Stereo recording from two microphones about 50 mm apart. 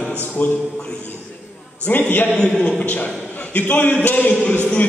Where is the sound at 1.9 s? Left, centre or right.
Left.